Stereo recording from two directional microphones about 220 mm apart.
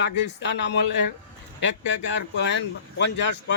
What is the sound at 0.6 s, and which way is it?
Speech, 50° left (ahead or behind).